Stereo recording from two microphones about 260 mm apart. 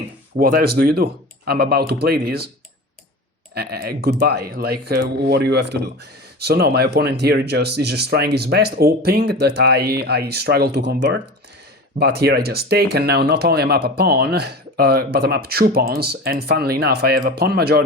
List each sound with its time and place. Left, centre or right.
0.3 s speech: right
3.5 s speech: right